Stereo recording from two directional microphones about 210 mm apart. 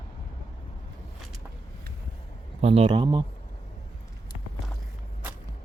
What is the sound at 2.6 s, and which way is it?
Speech, 30° right (ahead or behind).